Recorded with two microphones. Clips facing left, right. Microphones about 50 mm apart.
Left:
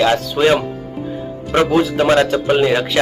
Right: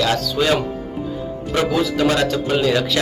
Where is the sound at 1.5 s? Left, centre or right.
Left.